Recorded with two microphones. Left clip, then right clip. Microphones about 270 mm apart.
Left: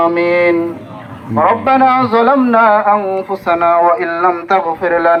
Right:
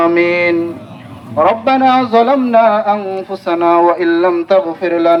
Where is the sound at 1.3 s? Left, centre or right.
Centre.